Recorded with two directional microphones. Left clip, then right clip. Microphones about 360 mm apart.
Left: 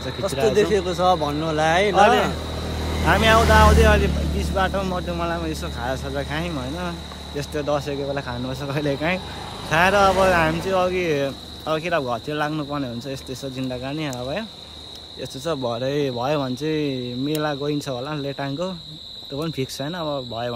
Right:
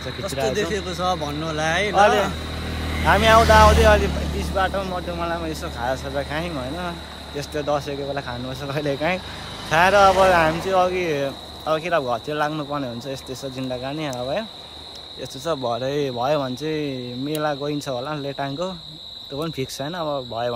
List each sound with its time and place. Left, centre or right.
0.0 s speech: centre
0.5 s speech: centre
2.0 s speech: centre
2.5 s vehicle: left
3.1 s speech: centre
15.4 s speech: centre